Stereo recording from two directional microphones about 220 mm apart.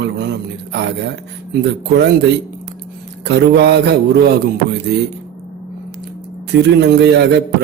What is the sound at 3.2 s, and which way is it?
Speech, 50° right (ahead or behind).